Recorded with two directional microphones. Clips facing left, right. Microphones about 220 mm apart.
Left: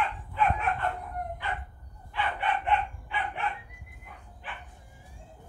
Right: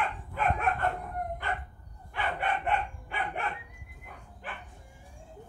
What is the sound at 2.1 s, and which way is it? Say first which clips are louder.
Dog: left 1 dB; 50° right (ahead or behind).